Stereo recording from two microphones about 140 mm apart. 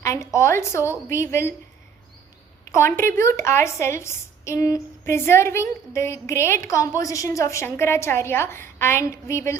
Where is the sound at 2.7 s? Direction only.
20° left (ahead or behind).